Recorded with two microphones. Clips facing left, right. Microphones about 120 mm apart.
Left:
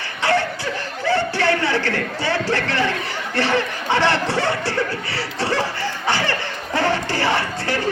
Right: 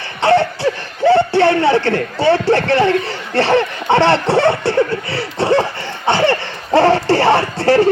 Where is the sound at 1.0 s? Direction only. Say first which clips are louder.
Right 9 dB; 25° right (ahead or behind).